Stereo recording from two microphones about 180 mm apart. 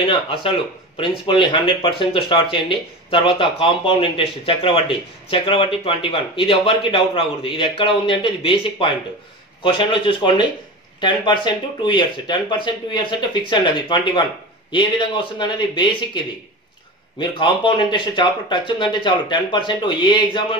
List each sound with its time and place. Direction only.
0.0 s speech: 30° left (ahead or behind)